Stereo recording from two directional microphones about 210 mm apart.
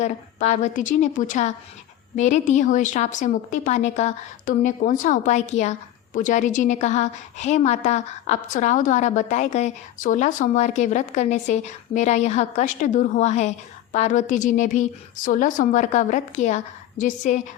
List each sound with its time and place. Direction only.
0.0 s a woman's voice: 35° left (ahead or behind)